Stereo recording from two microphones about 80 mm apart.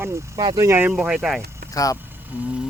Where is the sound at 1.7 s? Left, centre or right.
Left.